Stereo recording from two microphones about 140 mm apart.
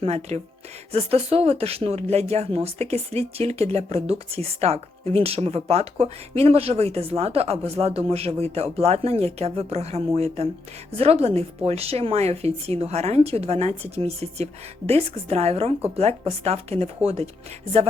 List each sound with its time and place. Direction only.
0.0 s speech: 50° right (ahead or behind)